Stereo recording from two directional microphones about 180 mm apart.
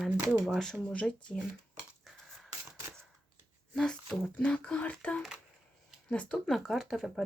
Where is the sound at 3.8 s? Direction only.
5° left (ahead or behind).